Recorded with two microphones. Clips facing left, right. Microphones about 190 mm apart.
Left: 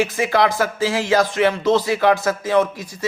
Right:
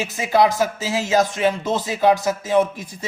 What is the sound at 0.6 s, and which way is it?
A man's voice, 20° right (ahead or behind).